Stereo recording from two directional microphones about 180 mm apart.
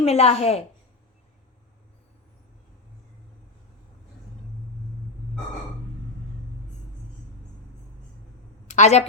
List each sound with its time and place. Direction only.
0.0 s a woman's voice: 35° left (ahead or behind)
8.6 s a woman's voice: 40° left (ahead or behind)